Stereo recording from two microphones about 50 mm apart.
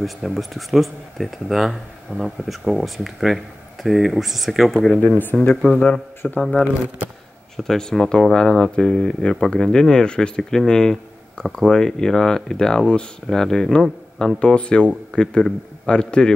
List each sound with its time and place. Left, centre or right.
0.0 s speech: centre
5.0 s speech: left
7.5 s speech: centre
10.7 s a sound: centre
11.5 s speech: centre